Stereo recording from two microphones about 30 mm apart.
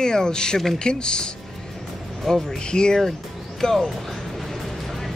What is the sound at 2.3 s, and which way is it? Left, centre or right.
Speech, centre.